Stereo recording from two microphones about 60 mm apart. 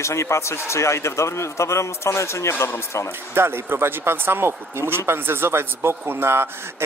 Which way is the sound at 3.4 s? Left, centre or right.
Right.